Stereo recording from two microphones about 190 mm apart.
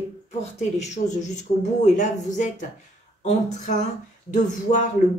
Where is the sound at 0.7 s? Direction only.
35° left (ahead or behind).